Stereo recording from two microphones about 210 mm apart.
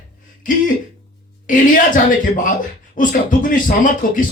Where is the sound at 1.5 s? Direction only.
40° left (ahead or behind).